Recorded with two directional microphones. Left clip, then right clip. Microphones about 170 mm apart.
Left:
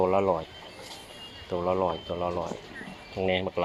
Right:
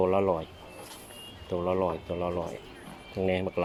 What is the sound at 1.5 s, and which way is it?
Speech, 10° right (ahead or behind).